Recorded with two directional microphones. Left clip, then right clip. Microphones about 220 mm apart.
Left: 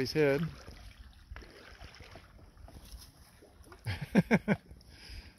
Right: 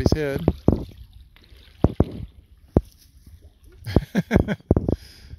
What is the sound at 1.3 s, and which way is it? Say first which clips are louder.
Boat: left 2 dB; 15° left (ahead or behind).